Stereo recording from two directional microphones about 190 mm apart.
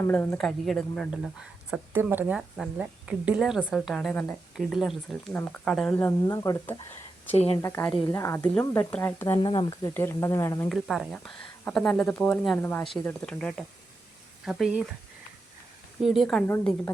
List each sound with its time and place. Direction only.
0.0 s speech: 10° left (ahead or behind)
1.7 s speech: 10° right (ahead or behind); by 6.7 s 15° left (ahead or behind)
7.3 s speech: 35° left (ahead or behind)
7.6 s speech: 10° left (ahead or behind)
10.7 s speech: centre (ahead or behind)
16.0 s speech: centre (ahead or behind)
16.5 s speech: 10° left (ahead or behind)